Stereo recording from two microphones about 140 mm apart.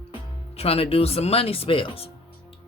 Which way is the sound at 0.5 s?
45° left (ahead or behind).